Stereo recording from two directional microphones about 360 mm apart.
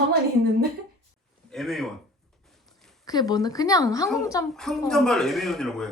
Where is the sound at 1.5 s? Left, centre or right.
Centre.